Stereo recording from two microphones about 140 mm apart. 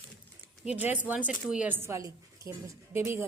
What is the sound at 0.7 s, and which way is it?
A woman's voice, 10° right (ahead or behind).